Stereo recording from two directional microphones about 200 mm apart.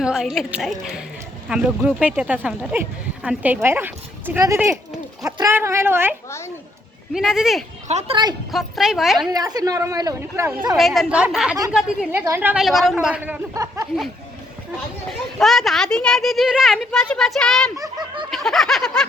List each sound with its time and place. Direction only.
0.0 s a woman's voice: centre (ahead or behind)
7.9 s speech: 30° right (ahead or behind)
8.5 s speech: centre (ahead or behind)
9.3 s a woman's voice: 20° right (ahead or behind)
10.8 s speech: centre (ahead or behind)
13.5 s a woman's voice: 15° right (ahead or behind)
15.4 s speech: centre (ahead or behind)
17.7 s speech: 20° right (ahead or behind)
18.3 s speech: centre (ahead or behind)